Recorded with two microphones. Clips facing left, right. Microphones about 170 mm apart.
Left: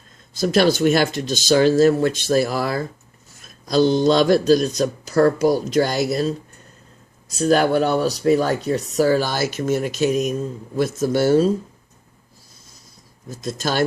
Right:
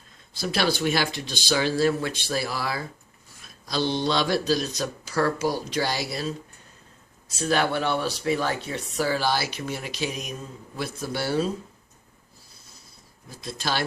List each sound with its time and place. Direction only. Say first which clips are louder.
0.3 s speech: left 9 dB; 45° left (ahead or behind)
7.3 s speech: left 8 dB; 40° left (ahead or behind)
13.2 s speech: left 6 dB; 45° left (ahead or behind)